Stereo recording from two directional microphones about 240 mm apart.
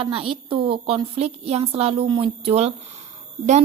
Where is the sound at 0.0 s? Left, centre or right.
Right.